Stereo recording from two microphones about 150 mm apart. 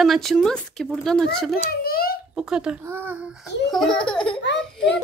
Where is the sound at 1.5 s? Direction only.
85° left.